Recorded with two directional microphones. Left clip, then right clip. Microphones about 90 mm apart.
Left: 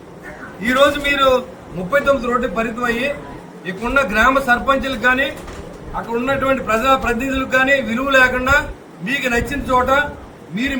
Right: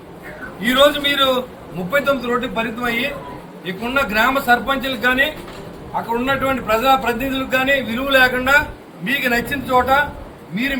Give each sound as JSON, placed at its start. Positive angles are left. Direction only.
{"t": 0.6, "sound": "a man's voice", "side_deg": 5}